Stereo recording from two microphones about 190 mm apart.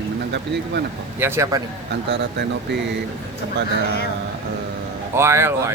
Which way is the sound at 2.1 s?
65° right (ahead or behind).